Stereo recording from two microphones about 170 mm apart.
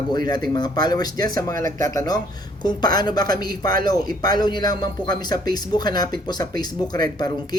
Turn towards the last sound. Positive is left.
turn(degrees=25)  # may be behind; listen again after turning